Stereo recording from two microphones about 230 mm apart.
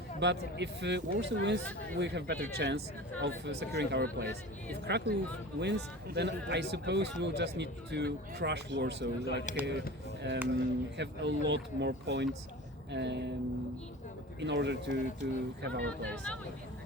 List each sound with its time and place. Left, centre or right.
0.2 s speech: right
9.6 s speech: centre
10.5 s speech: right
14.4 s speech: right
15.9 s speech: centre